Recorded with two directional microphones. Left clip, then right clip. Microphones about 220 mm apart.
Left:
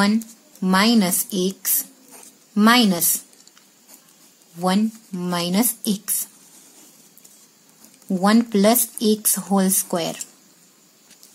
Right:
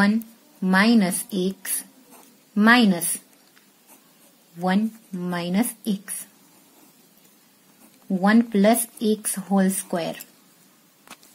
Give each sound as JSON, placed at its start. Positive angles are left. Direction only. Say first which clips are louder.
{"t": 0.0, "sound": "a woman's voice", "louder": "left 1 dB", "side_deg": 15}
{"t": 4.6, "sound": "speech", "louder": "left 3 dB", "side_deg": 20}
{"t": 8.1, "sound": "speech", "louder": "left 2 dB", "side_deg": 20}